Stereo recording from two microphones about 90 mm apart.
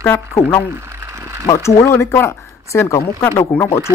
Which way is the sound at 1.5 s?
40° left (ahead or behind).